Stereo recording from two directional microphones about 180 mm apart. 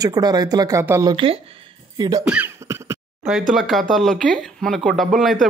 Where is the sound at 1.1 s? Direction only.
30° right (ahead or behind).